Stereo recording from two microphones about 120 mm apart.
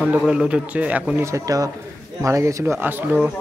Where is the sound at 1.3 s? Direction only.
25° right (ahead or behind).